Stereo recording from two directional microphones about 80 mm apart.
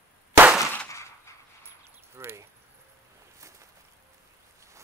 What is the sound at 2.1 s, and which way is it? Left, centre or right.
Speech, right.